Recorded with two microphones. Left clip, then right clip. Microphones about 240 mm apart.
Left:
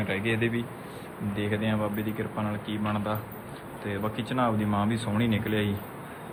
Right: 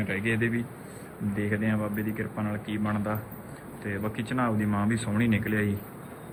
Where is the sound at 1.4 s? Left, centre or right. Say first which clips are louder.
Left 1 dB; centre.